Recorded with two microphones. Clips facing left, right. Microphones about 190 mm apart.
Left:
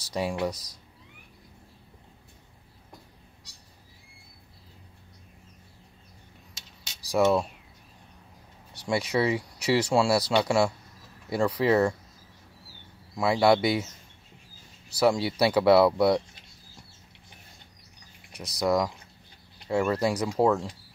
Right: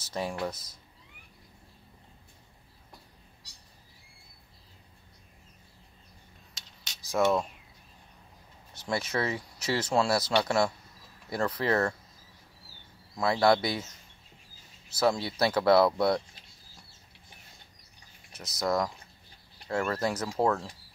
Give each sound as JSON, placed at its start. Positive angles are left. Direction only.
{"t": 0.1, "sound": "speech", "side_deg": 10}
{"t": 7.1, "sound": "speech", "side_deg": 10}
{"t": 8.8, "sound": "speech", "side_deg": 10}
{"t": 13.1, "sound": "speech", "side_deg": 10}
{"t": 15.0, "sound": "speech", "side_deg": 10}
{"t": 18.6, "sound": "speech", "side_deg": 10}